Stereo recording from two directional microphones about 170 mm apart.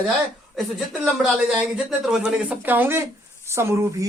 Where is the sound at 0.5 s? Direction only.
Centre (ahead or behind).